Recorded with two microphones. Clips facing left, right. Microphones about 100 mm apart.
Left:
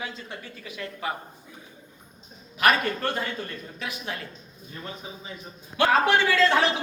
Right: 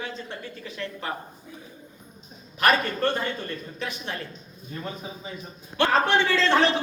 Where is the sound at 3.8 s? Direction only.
5° left (ahead or behind).